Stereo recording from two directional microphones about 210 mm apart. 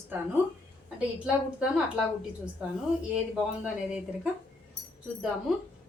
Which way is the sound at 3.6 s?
5° right (ahead or behind).